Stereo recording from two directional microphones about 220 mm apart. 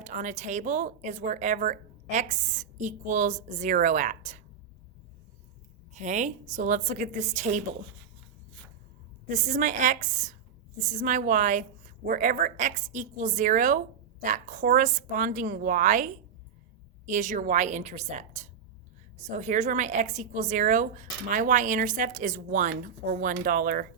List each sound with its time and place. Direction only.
0.0 s a woman's voice: 35° right (ahead or behind)
5.9 s a woman's voice: 35° right (ahead or behind)
9.3 s a woman's voice: 35° right (ahead or behind)